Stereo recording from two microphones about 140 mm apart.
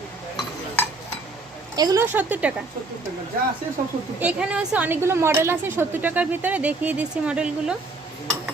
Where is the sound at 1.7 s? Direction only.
25° right (ahead or behind).